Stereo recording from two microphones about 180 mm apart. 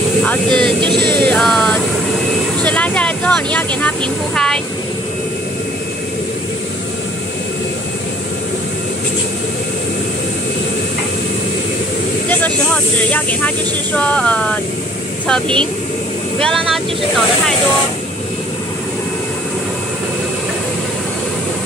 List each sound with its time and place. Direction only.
0.2 s vehicle: 5° left (ahead or behind)
0.8 s music: 25° right (ahead or behind)
1.2 s music: 5° left (ahead or behind)
2.6 s speech: 5° left (ahead or behind)
12.3 s speech: 5° left (ahead or behind)